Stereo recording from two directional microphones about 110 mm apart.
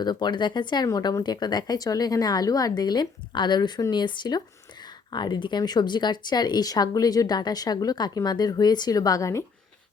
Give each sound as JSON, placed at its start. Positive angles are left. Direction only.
{"t": 0.0, "sound": "speech", "side_deg": 40}
{"t": 0.9, "sound": "a woman's voice", "side_deg": 30}